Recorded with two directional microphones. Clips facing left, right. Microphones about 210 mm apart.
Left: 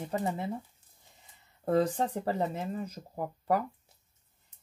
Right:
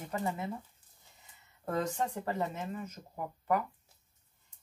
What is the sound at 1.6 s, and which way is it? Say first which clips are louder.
Speech: left 6 dB; 35° left (ahead or behind).